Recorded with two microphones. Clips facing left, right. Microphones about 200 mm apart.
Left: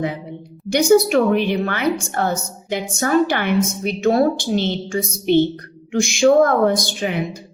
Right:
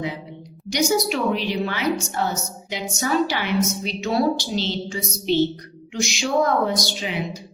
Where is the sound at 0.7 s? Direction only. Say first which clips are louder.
Left 8 dB; 55° left (ahead or behind).